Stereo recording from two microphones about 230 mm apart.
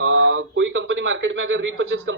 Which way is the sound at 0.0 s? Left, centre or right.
Right.